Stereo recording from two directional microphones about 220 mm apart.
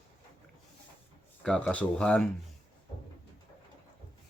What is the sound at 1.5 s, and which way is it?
Speech, 5° left (ahead or behind).